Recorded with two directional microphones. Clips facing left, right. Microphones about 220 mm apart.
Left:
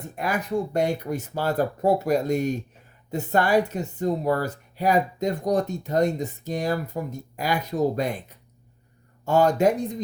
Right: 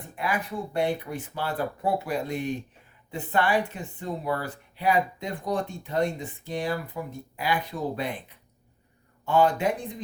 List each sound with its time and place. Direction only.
0.2 s speech: 45° left (ahead or behind)